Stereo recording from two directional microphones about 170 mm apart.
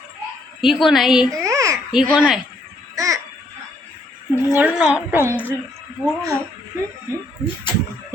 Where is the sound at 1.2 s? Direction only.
20° right (ahead or behind).